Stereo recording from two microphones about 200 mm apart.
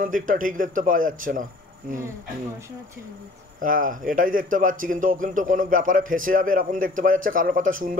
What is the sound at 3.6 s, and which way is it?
A man's voice, 45° right (ahead or behind).